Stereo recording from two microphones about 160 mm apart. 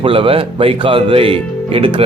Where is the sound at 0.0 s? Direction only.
35° right (ahead or behind).